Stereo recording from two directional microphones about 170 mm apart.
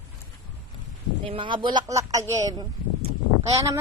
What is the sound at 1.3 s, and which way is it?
A woman's voice, 30° right (ahead or behind).